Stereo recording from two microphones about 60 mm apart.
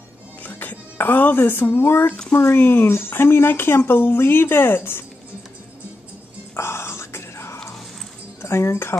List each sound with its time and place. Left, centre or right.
0.4 s speech: left
6.5 s whispering: left
8.4 s speech: left